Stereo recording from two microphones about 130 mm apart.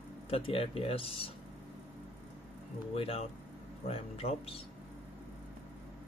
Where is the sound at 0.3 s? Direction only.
45° left (ahead or behind).